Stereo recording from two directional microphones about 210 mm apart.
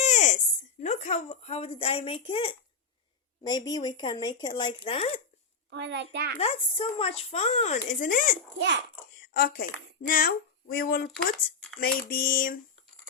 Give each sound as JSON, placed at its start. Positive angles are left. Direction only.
{"t": 0.0, "sound": "a sound", "side_deg": 35}
{"t": 0.8, "sound": "speech", "side_deg": 35}
{"t": 5.7, "sound": "a child's voice", "side_deg": -55}
{"t": 6.4, "sound": "a child's voice", "side_deg": 25}